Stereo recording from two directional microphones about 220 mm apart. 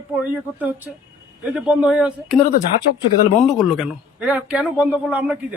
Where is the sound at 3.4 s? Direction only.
Centre (ahead or behind).